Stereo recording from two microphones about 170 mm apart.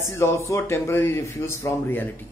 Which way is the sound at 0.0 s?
15° left (ahead or behind).